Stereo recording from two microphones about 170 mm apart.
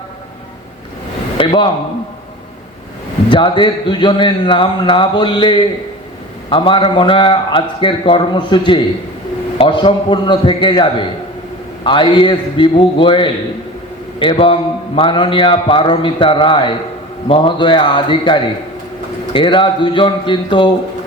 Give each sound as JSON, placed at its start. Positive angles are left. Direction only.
{"t": 1.4, "sound": "a man's voice", "side_deg": 30}
{"t": 3.2, "sound": "a man's voice", "side_deg": 30}